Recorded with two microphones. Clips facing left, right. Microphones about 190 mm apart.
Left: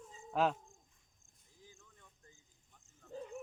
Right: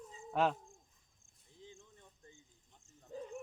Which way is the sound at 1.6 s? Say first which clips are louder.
Right 6 dB; 25° right (ahead or behind).